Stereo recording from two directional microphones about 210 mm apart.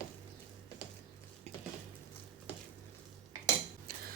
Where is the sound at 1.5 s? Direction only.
30° right (ahead or behind).